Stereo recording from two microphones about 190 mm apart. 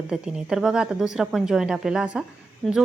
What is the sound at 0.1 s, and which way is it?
Speech, 5° right (ahead or behind).